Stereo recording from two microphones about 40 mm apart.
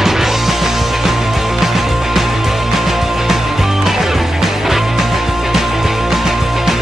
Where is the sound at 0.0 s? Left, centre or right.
Centre.